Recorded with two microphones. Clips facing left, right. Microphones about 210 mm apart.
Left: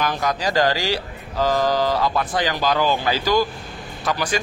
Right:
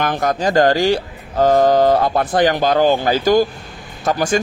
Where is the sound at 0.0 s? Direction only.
50° right (ahead or behind).